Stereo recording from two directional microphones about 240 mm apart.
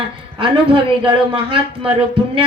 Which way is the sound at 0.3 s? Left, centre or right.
Right.